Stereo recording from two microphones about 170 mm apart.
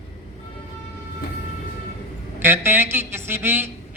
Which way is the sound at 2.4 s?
15° right (ahead or behind).